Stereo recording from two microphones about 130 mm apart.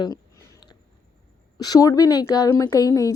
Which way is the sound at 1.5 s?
30° left (ahead or behind).